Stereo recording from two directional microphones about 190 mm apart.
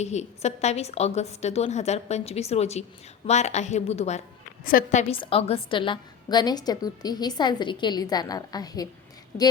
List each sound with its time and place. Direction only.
0.0 s a woman's voice: 35° left (ahead or behind)
4.6 s a woman's voice: 50° left (ahead or behind); by 8.9 s 20° left (ahead or behind)